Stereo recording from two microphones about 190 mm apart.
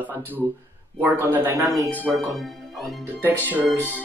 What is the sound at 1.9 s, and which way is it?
Speech, 10° left (ahead or behind).